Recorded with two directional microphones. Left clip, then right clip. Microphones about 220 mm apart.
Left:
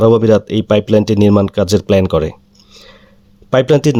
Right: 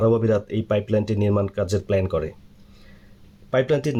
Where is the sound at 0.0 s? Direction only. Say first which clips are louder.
Left 10 dB; 45° left (ahead or behind).